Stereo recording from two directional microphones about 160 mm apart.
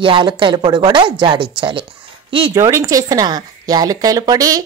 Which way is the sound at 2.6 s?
20° right (ahead or behind).